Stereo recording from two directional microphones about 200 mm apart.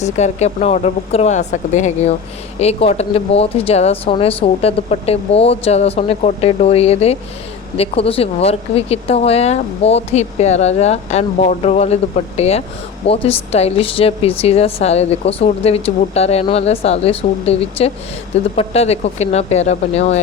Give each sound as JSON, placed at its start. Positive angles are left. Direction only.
{"t": 0.0, "sound": "speech", "side_deg": 35}